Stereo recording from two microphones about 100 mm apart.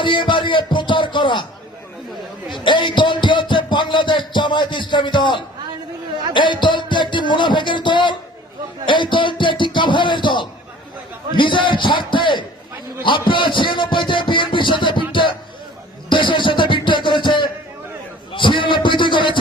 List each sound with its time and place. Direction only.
0.0 s speech: 55° left (ahead or behind)
2.5 s a sound: 50° left (ahead or behind)
6.3 s music: 50° left (ahead or behind)
8.9 s a sound: 55° left (ahead or behind)
11.3 s speech: 55° left (ahead or behind)
16.0 s music: 55° left (ahead or behind)
18.3 s a man's voice: 55° left (ahead or behind)